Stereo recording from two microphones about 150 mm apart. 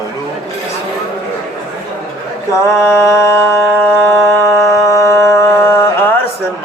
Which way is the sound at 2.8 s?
15° left (ahead or behind).